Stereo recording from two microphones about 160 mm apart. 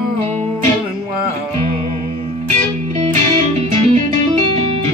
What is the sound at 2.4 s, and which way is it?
Music, 45° right (ahead or behind).